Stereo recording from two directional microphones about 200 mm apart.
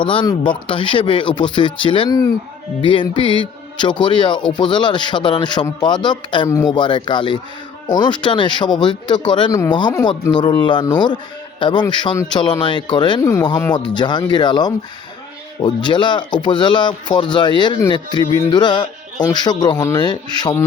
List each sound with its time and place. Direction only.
0.0 s a man's voice: 25° left (ahead or behind)